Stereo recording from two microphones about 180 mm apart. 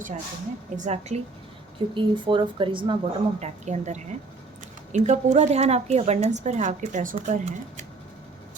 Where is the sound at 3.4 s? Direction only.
40° right (ahead or behind).